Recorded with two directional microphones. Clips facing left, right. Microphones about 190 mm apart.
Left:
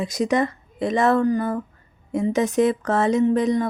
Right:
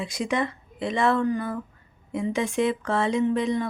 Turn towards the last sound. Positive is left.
turn(degrees=45)  # may be behind; listen again after turning